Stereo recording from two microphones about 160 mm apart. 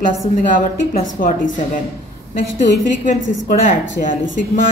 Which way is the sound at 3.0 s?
50° left (ahead or behind).